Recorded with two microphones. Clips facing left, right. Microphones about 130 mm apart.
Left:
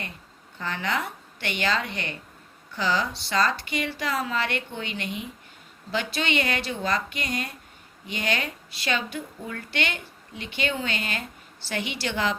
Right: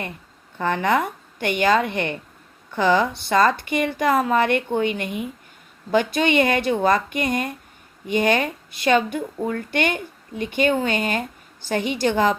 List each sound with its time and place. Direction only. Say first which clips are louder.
0.6 s speech: right 9 dB; 55° right (ahead or behind)